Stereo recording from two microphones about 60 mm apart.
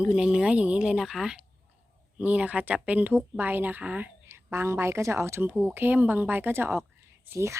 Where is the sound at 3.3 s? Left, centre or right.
Right.